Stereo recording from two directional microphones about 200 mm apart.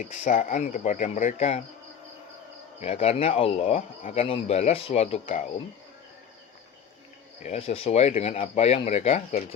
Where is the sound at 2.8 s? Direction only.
30° left (ahead or behind).